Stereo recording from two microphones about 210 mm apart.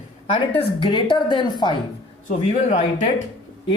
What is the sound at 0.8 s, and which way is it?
A woman's voice, 25° left (ahead or behind).